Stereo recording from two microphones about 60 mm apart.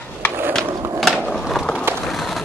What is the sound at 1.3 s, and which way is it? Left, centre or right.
Skateboard, centre.